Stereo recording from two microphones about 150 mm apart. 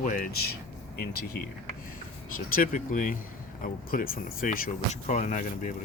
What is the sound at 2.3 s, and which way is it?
Speech, 65° left (ahead or behind).